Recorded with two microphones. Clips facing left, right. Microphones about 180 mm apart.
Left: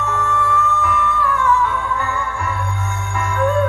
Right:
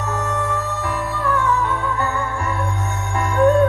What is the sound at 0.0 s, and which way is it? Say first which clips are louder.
Music: left 2 dB; 35° right (ahead or behind).